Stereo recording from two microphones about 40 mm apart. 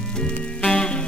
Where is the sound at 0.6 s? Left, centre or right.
Left.